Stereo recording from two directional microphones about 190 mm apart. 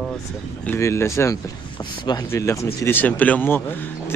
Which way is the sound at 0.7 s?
15° left (ahead or behind).